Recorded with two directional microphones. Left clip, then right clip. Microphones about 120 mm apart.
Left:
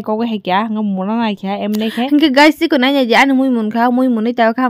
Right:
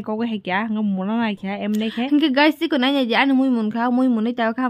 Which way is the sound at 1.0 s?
30° left (ahead or behind).